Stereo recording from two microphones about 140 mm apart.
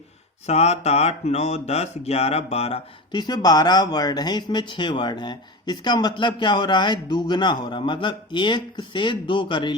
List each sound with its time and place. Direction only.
0.4 s speech: 50° left (ahead or behind)
3.1 s speech: 30° left (ahead or behind)